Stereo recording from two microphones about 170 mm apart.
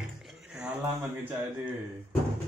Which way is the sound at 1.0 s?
15° right (ahead or behind).